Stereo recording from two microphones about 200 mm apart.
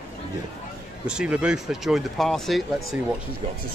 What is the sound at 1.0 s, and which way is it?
Speech, 5° right (ahead or behind).